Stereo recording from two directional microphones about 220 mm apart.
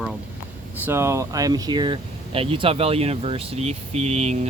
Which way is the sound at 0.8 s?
10° right (ahead or behind).